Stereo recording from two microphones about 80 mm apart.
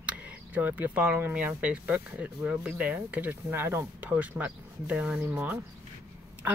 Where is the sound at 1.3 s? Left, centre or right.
Centre.